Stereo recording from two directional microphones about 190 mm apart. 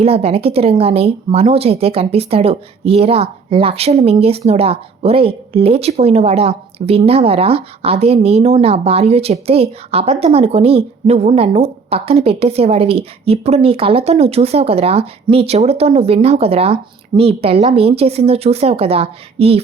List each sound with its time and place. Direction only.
0.0 s speech: 30° right (ahead or behind)